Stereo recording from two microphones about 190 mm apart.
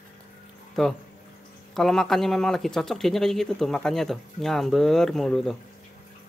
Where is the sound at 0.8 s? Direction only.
Centre (ahead or behind).